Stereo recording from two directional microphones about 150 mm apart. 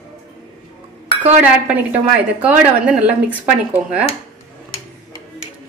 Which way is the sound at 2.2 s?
10° right (ahead or behind).